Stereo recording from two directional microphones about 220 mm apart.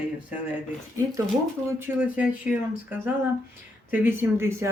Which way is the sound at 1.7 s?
10° right (ahead or behind).